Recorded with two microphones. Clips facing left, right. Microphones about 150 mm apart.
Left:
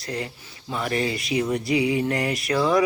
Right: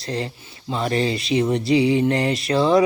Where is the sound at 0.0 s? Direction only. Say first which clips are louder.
Right 4 dB; 25° right (ahead or behind).